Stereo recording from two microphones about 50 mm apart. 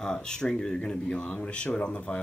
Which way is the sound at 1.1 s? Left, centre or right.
Left.